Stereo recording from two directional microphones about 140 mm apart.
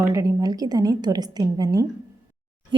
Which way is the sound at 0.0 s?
25° right (ahead or behind).